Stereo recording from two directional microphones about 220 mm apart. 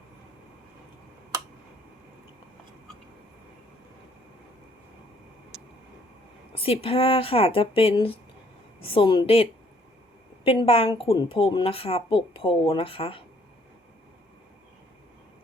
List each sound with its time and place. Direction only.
6.6 s speech: 25° left (ahead or behind)